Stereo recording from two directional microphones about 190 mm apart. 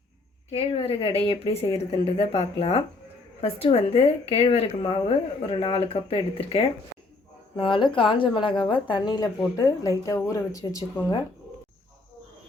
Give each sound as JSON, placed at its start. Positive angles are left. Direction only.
{"t": 0.5, "sound": "a woman's voice", "side_deg": 30}